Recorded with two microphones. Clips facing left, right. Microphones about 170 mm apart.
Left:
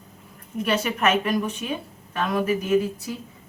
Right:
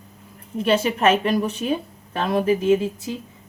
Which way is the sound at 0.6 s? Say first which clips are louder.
Right 5 dB; 30° right (ahead or behind).